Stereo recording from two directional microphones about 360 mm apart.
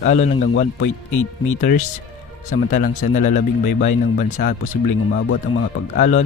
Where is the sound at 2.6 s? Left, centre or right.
Left.